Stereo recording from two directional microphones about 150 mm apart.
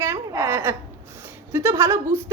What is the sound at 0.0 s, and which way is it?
A woman's voice, 15° right (ahead or behind).